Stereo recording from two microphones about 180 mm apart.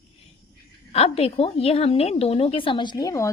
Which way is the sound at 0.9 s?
35° left (ahead or behind).